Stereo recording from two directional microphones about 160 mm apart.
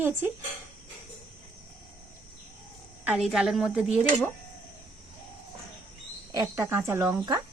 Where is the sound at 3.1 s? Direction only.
5° right (ahead or behind).